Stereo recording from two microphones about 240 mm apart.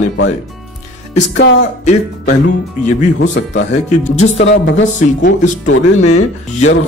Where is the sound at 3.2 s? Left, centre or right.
Left.